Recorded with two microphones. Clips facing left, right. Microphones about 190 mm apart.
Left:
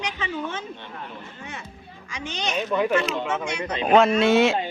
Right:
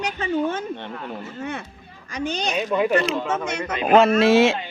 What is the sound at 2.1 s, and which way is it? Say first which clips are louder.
Speech: right 8 dB; 40° right (ahead or behind).